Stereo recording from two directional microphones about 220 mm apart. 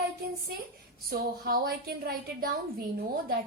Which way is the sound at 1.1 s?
40° right (ahead or behind).